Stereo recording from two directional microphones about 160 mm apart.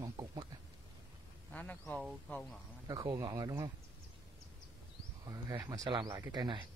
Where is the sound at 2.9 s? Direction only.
25° right (ahead or behind).